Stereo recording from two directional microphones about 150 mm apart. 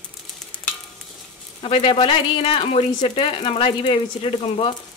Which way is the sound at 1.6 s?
35° left (ahead or behind).